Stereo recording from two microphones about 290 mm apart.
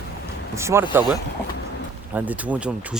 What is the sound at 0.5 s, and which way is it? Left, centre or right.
Speech, centre.